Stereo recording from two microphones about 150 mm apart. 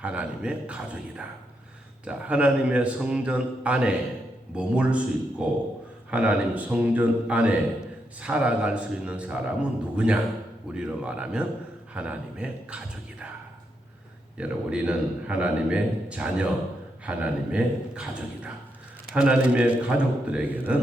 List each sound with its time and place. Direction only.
0.0 s a man's voice: 10° right (ahead or behind)
14.3 s a man's voice: 5° right (ahead or behind)